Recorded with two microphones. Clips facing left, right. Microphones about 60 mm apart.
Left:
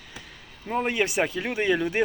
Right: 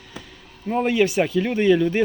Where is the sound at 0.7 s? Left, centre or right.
Centre.